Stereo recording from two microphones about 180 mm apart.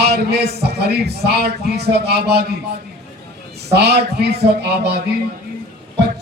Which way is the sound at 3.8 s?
65° right (ahead or behind).